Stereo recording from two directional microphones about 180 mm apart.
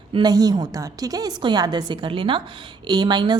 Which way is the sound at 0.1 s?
20° right (ahead or behind).